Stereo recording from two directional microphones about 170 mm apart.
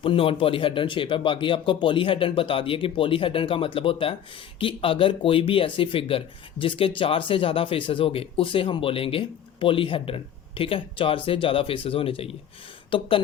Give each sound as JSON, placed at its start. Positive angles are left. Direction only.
{"t": 0.0, "sound": "speech", "side_deg": 30}